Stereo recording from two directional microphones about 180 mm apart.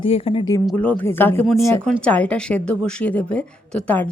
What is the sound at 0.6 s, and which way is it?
Speech, 5° left (ahead or behind).